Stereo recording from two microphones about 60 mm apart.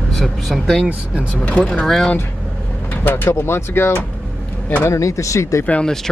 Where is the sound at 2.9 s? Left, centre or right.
Left.